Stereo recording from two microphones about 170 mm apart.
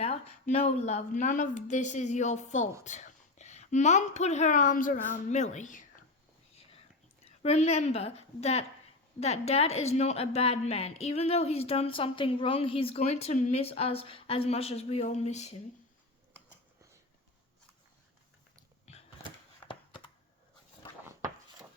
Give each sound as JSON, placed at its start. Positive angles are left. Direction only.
{"t": 0.0, "sound": "a woman's voice", "side_deg": 40}
{"t": 6.6, "sound": "whispering", "side_deg": 35}
{"t": 7.3, "sound": "a woman's voice", "side_deg": 40}
{"t": 18.9, "sound": "creak", "side_deg": 40}
{"t": 19.6, "sound": "a sound", "side_deg": 30}